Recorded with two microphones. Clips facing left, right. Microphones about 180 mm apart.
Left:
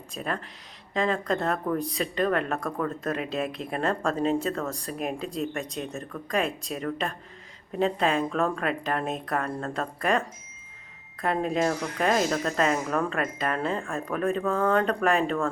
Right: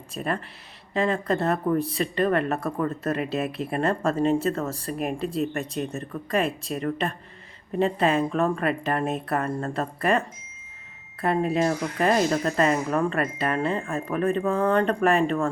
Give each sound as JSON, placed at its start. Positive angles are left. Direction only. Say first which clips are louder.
{"t": 0.1, "sound": "speech", "louder": "right 3 dB", "side_deg": -5}